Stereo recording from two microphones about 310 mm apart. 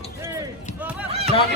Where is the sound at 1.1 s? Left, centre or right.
Centre.